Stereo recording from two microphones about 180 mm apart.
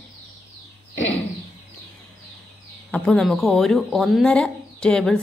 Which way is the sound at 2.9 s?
5° left (ahead or behind).